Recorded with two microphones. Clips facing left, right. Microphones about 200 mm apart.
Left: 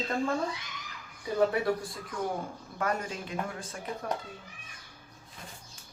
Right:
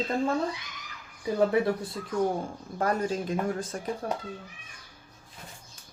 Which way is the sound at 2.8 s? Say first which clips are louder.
Right 5 dB; 35° right (ahead or behind).